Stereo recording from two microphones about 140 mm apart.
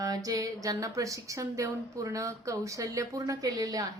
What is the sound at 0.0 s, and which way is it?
Speech, 25° right (ahead or behind).